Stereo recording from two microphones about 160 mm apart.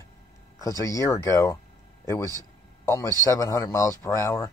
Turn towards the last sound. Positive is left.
turn(degrees=15)  # may be behind; listen again after turning